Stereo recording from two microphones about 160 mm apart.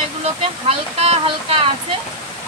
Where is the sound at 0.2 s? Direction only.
40° right (ahead or behind).